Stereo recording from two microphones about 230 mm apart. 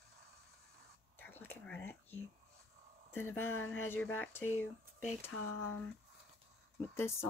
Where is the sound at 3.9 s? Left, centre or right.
Centre.